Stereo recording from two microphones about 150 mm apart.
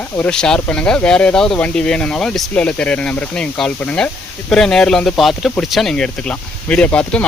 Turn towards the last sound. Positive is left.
turn(degrees=5)  # may be behind; listen again after turning